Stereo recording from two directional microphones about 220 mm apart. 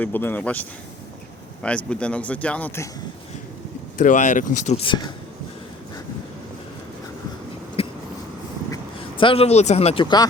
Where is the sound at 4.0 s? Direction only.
35° left (ahead or behind).